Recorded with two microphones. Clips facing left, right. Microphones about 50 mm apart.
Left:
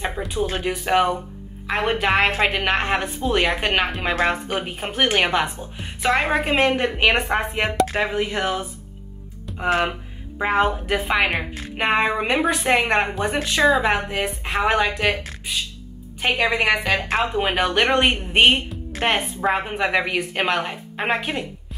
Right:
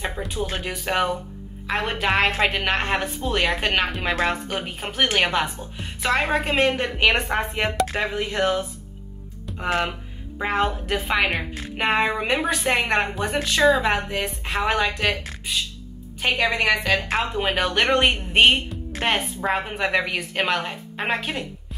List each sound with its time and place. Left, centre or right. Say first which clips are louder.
0.5 s a woman's voice: left 5 dB; centre
11.1 s a woman's voice: left 2 dB; centre
16.2 s a woman's voice: left 1 dB; centre